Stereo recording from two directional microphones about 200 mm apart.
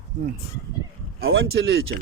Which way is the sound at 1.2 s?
80° right.